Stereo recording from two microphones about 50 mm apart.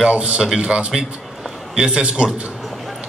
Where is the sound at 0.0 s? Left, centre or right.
Right.